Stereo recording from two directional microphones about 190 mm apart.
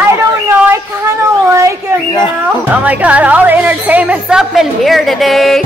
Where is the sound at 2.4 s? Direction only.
5° right (ahead or behind).